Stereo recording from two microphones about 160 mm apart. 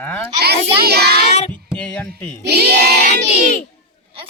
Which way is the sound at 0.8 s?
80° right.